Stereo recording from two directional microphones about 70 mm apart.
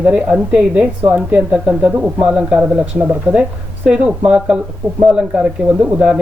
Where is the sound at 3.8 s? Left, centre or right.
Centre.